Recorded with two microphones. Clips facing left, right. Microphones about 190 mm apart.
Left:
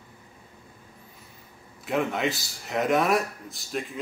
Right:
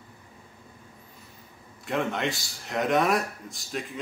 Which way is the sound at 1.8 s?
Centre (ahead or behind).